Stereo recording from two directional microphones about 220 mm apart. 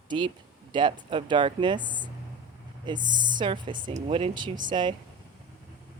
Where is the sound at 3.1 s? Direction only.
20° right (ahead or behind).